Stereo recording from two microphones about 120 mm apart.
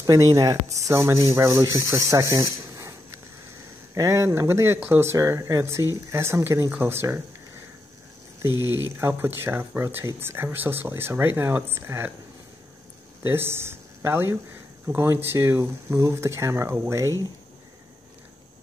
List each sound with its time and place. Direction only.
0.0 s speech: 25° right (ahead or behind)
3.9 s speech: 25° right (ahead or behind)
8.5 s speech: 35° left (ahead or behind)
8.9 s speech: 20° right (ahead or behind)
13.2 s speech: 20° right (ahead or behind)